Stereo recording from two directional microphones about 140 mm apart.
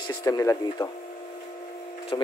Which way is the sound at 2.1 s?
30° left (ahead or behind).